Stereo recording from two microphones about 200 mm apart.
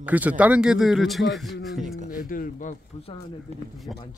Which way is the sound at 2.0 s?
45° left (ahead or behind).